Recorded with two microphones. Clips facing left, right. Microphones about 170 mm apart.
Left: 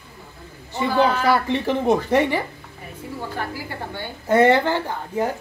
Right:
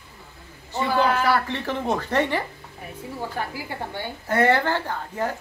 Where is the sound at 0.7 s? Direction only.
20° left (ahead or behind).